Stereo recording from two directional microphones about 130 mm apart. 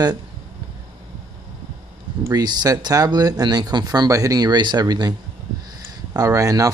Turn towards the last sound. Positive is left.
turn(degrees=-25)  # may be behind; listen again after turning